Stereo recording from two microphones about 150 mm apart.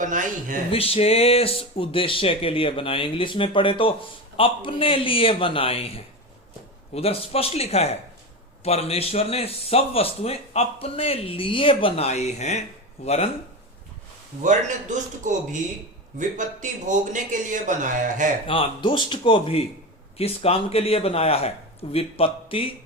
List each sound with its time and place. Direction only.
0.0 s a man's voice: 60° right (ahead or behind)
0.7 s a man's voice: 40° left (ahead or behind)
14.4 s a man's voice: 55° right (ahead or behind)
18.4 s a man's voice: 35° left (ahead or behind)